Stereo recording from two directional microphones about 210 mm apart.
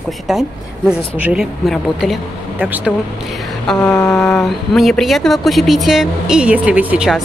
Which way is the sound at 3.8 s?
15° left (ahead or behind).